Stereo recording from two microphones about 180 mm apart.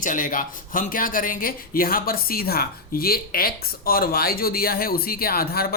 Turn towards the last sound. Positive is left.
turn(degrees=55)  # may be behind; listen again after turning